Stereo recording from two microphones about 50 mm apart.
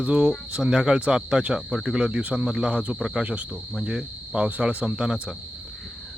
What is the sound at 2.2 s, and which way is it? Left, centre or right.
Cricket, right.